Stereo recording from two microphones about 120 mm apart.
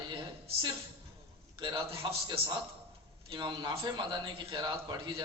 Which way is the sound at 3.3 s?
40° right (ahead or behind).